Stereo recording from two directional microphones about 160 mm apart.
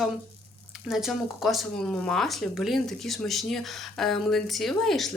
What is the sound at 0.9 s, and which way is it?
Speech, centre (ahead or behind).